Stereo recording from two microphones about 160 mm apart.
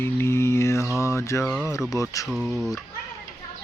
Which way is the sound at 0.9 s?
20° left (ahead or behind).